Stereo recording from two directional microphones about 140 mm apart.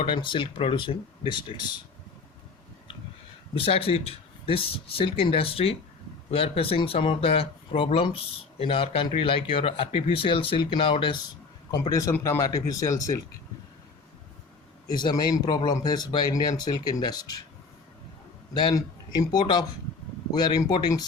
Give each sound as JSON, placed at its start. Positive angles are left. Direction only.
{"t": 0.0, "sound": "speech", "side_deg": 35}
{"t": 3.5, "sound": "speech", "side_deg": 40}
{"t": 11.9, "sound": "speech", "side_deg": 25}
{"t": 14.8, "sound": "speech", "side_deg": 30}
{"t": 18.5, "sound": "speech", "side_deg": 30}